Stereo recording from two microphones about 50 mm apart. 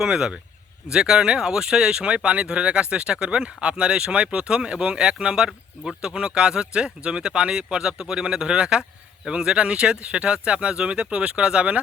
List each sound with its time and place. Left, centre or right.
0.0 s speech: centre